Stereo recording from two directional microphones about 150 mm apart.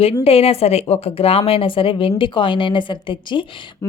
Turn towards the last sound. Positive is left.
turn(degrees=35)  # may be behind; listen again after turning